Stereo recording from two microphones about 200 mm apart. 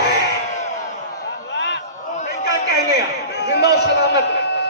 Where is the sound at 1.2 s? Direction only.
60° left (ahead or behind).